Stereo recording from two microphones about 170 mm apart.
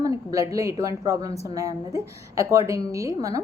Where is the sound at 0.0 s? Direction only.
20° right (ahead or behind).